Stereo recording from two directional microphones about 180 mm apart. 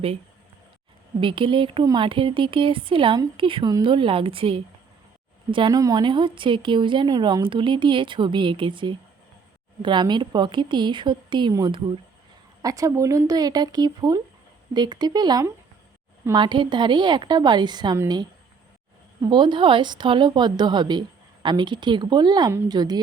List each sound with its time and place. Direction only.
1.2 s speech: 30° right (ahead or behind)